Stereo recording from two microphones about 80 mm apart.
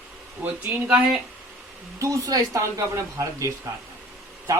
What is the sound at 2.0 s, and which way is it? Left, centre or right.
Speech, right.